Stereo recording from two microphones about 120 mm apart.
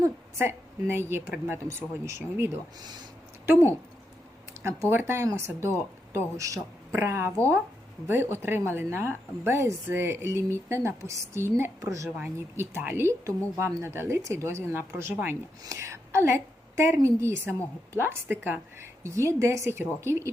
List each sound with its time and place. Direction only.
0.0 s a woman's voice: 20° right (ahead or behind)